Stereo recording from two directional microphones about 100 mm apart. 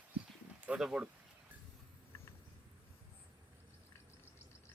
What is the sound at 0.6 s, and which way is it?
Speech, 10° right (ahead or behind).